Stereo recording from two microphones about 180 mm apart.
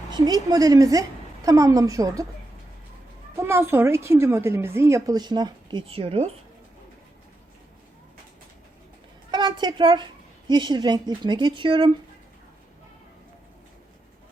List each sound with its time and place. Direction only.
0.1 s a woman's voice: 20° right (ahead or behind)
3.3 s a woman's voice: 15° right (ahead or behind); by 6.3 s 35° right (ahead or behind)
9.3 s a child's voice: 25° right (ahead or behind)